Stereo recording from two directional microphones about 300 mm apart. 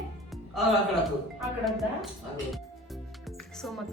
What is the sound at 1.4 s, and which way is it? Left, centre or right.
Speech, centre.